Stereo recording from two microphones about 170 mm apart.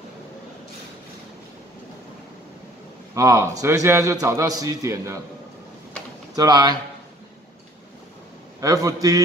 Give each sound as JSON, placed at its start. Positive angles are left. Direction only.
{"t": 3.2, "sound": "a man's voice", "side_deg": -20}
{"t": 6.3, "sound": "a man's voice", "side_deg": -25}
{"t": 8.5, "sound": "a man's voice", "side_deg": -20}